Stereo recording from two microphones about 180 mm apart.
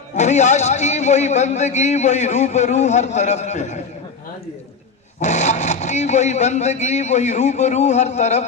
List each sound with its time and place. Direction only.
0.2 s a man's voice: 40° left (ahead or behind)
5.2 s a man's voice: 40° left (ahead or behind)